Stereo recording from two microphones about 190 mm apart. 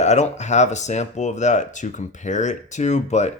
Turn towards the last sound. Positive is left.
turn(degrees=35)  # may be behind; listen again after turning